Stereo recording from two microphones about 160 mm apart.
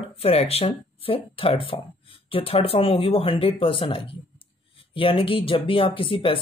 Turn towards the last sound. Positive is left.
turn(degrees=35)  # may be behind; listen again after turning